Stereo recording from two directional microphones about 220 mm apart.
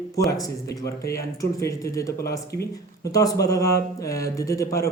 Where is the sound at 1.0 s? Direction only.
45° left (ahead or behind).